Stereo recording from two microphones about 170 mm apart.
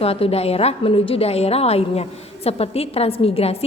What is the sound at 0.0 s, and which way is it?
A woman's voice, 35° left (ahead or behind).